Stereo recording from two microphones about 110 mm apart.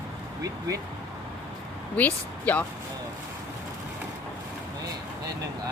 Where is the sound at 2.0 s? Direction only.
15° left (ahead or behind).